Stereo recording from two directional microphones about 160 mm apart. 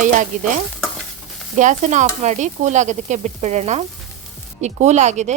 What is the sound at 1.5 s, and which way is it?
Speech, 50° right (ahead or behind).